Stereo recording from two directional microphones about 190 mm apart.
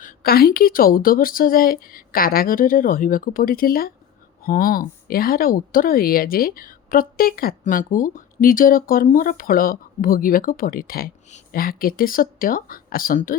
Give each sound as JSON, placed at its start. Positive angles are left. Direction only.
{"t": 0.0, "sound": "speech", "side_deg": 50}